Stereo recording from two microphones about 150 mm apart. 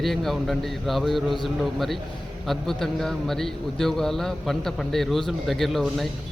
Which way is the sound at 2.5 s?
Centre (ahead or behind).